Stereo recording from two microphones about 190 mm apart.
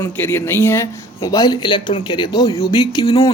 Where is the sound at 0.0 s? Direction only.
15° left (ahead or behind).